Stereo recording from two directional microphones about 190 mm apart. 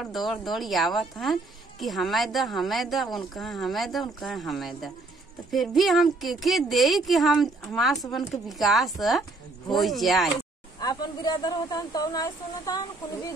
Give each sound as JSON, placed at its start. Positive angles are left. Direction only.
{"t": 0.0, "sound": "a woman's voice", "side_deg": 0}
{"t": 10.8, "sound": "speech", "side_deg": 20}